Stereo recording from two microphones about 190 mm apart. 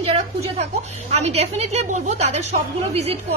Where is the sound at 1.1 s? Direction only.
35° right (ahead or behind).